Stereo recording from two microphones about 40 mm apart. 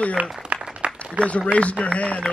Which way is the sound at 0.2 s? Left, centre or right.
Right.